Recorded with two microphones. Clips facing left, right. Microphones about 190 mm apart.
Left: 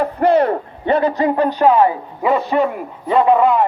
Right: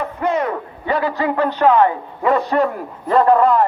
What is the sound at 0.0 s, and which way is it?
A man's voice, 35° left (ahead or behind).